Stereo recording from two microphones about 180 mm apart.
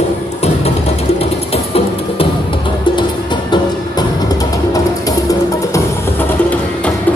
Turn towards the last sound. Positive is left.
turn(degrees=10)  # may be behind; listen again after turning